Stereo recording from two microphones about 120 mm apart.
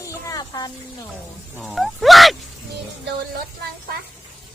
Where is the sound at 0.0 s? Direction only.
25° left (ahead or behind).